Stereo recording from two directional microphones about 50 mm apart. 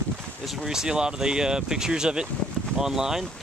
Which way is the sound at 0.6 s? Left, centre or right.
Centre.